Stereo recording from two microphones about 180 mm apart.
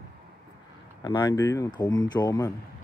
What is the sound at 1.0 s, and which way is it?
Speech, 20° left (ahead or behind).